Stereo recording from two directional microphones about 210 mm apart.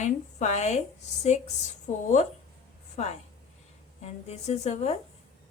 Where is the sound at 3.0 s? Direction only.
35° left (ahead or behind).